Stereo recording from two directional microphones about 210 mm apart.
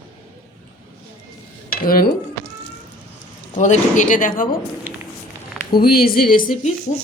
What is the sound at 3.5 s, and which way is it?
Speech, 35° left (ahead or behind).